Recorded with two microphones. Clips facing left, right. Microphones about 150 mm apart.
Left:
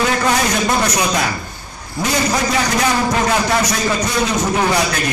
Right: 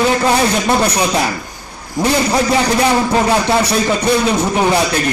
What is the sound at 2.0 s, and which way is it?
A man's voice, 30° right (ahead or behind).